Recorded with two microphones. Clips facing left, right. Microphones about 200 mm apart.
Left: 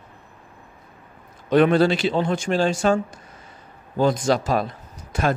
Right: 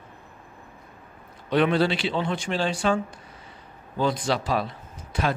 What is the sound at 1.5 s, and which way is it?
Speech, 45° left (ahead or behind).